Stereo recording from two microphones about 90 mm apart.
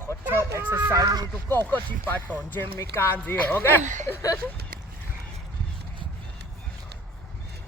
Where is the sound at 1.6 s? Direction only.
20° left (ahead or behind).